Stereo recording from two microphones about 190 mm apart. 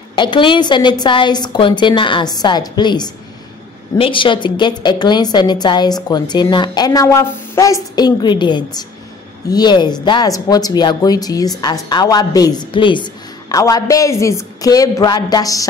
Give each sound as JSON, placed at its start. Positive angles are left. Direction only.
{"t": 0.1, "sound": "a woman's voice", "side_deg": 25}